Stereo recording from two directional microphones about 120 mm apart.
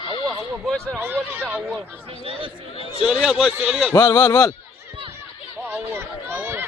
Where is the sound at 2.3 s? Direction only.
50° right (ahead or behind).